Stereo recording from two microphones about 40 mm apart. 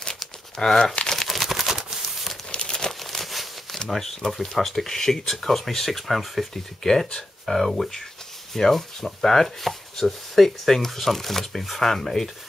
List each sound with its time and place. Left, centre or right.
0.6 s speech: centre
1.0 s crumpling: centre
1.8 s a sound: centre
2.5 s crumpling: centre
3.0 s a sound: centre
4.2 s speech: left
4.6 s chopping: centre
6.8 s speech: centre
7.4 s chopping: centre